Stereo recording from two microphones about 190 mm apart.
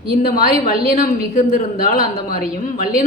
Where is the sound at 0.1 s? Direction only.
50° left (ahead or behind).